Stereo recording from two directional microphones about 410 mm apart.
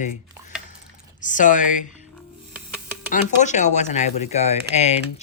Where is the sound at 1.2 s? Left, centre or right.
Centre.